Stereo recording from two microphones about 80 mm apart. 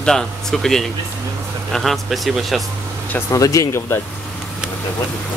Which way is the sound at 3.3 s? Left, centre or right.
Left.